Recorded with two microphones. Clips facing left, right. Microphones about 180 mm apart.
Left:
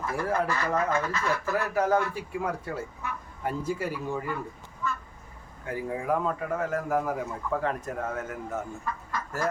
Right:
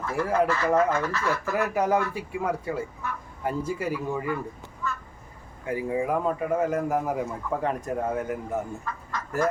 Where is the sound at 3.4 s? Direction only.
Centre (ahead or behind).